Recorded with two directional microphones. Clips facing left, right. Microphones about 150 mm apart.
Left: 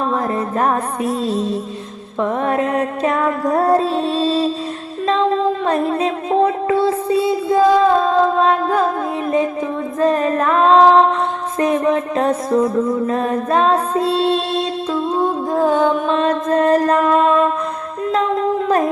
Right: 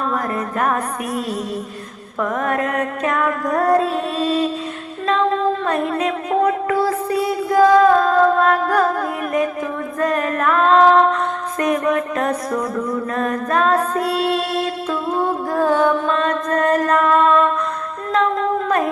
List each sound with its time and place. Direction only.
0.1 s music: 30° left (ahead or behind)
2.2 s music: 30° left (ahead or behind)
10.0 s female singing: 30° left (ahead or behind)
11.6 s music: 30° left (ahead or behind)
16.2 s mantra: 30° left (ahead or behind)